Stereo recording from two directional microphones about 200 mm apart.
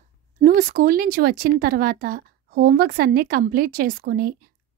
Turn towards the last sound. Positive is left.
turn(degrees=-45)  # may be behind; listen again after turning